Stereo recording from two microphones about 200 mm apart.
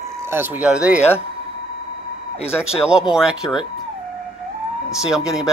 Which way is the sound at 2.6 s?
5° right (ahead or behind).